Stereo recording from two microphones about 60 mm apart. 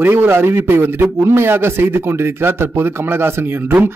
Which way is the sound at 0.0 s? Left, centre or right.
Right.